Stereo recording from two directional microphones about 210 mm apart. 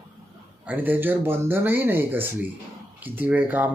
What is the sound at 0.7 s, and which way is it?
Speech, 10° right (ahead or behind).